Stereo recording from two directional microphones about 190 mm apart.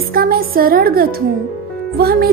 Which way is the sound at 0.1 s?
50° right (ahead or behind).